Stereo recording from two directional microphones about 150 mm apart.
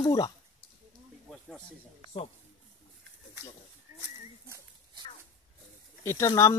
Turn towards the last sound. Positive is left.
turn(degrees=20)  # may be behind; listen again after turning